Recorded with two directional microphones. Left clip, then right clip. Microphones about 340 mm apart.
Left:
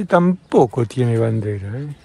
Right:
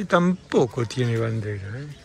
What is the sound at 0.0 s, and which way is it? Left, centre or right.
Speech, centre.